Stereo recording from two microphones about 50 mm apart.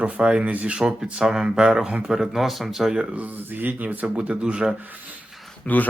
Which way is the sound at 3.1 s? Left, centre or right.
Right.